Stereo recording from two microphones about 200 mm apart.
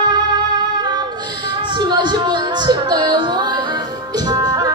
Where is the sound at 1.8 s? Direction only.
20° right (ahead or behind).